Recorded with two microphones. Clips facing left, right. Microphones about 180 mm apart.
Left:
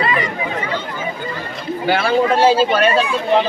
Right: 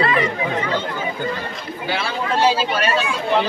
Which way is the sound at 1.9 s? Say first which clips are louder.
Left 8 dB; 55° left (ahead or behind).